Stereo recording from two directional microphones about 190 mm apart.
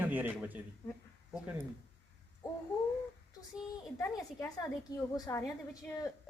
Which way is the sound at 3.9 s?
15° left (ahead or behind).